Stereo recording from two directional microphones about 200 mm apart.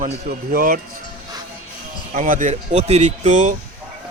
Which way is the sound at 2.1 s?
40° right (ahead or behind).